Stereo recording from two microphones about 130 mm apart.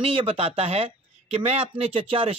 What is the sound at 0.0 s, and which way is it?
Speech, 50° right (ahead or behind).